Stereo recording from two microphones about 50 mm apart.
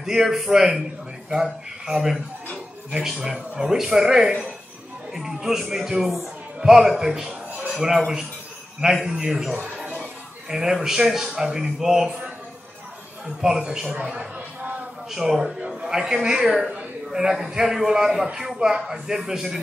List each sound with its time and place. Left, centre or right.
0.0 s speech: centre
9.0 s speech: centre
13.4 s speech: centre
15.0 s a woman's voice: centre
17.1 s speech: centre